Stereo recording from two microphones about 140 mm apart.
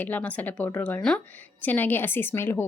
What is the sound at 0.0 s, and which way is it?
A woman's voice, 10° left (ahead or behind).